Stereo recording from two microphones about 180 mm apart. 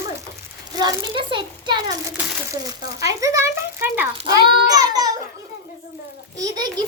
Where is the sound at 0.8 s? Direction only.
25° right (ahead or behind).